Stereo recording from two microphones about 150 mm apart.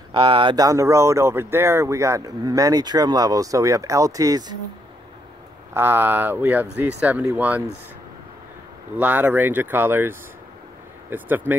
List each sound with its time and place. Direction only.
0.1 s speech: 35° right (ahead or behind)
0.7 s speech: 20° right (ahead or behind)
5.8 s speech: 15° right (ahead or behind)
8.9 s speech: 10° right (ahead or behind)